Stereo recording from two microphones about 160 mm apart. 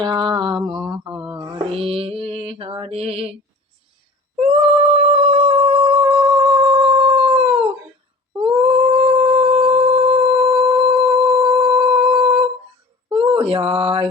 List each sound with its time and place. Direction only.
0.0 s mantra: 30° right (ahead or behind)
4.4 s cat: 35° right (ahead or behind)
8.4 s humming: 35° right (ahead or behind)
13.1 s a sound: 30° right (ahead or behind)